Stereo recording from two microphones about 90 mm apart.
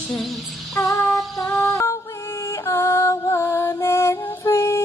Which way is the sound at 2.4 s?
35° left (ahead or behind).